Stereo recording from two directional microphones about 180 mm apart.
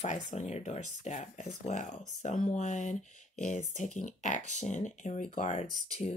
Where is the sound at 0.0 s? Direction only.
45° left (ahead or behind).